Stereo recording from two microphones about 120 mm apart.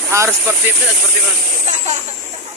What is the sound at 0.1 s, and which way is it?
Speech, 25° right (ahead or behind).